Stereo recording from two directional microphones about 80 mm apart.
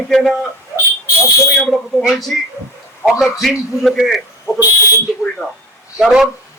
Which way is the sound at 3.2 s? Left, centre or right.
Centre.